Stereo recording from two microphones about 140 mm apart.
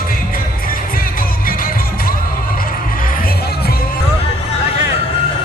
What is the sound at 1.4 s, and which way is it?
Music, 90° left.